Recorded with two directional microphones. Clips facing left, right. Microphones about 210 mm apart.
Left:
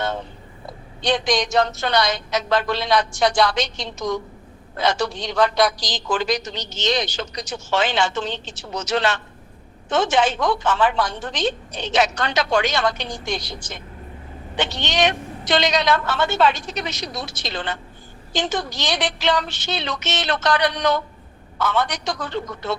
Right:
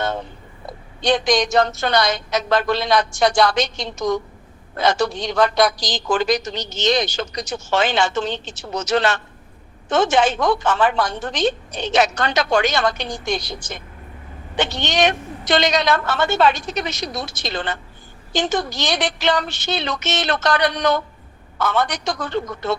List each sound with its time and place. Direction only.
1.0 s a woman's voice: 45° right (ahead or behind)